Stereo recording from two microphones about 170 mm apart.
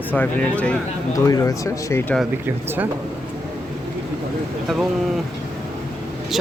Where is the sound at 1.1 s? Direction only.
20° left (ahead or behind).